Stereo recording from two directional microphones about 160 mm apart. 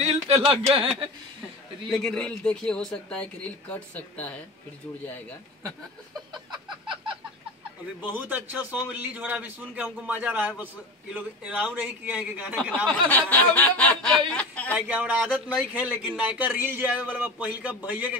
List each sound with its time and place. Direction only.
0.0 s a sound: 40° right (ahead or behind)
1.9 s speech: 5° left (ahead or behind)
6.3 s a sound: 30° right (ahead or behind)
8.0 s a man's voice: 10° right (ahead or behind)
13.1 s snicker: 10° left (ahead or behind)
14.9 s a man's voice: 10° right (ahead or behind)